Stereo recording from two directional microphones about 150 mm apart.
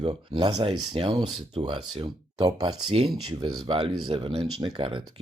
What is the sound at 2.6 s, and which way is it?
Speech, 40° right (ahead or behind).